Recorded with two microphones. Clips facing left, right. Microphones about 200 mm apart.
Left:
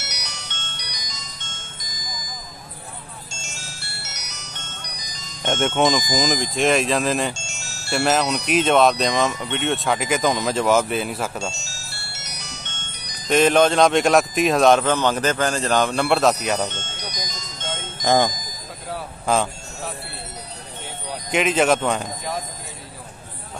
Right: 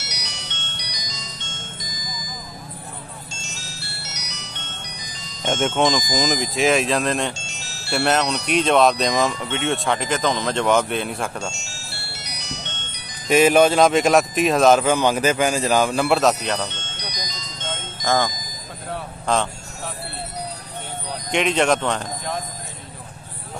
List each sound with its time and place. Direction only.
0.0 s music: 50° left (ahead or behind)
3.3 s music: 50° left (ahead or behind)
5.5 s speech: centre (ahead or behind)
7.3 s chime: 45° left (ahead or behind)
7.9 s speech: centre (ahead or behind)
11.5 s music: 40° left (ahead or behind)
13.3 s speech: 10° right (ahead or behind)
16.6 s music: 50° left (ahead or behind)
18.0 s speech: 20° left (ahead or behind)
18.9 s speech: 5° left (ahead or behind)
21.3 s speech: 5° left (ahead or behind)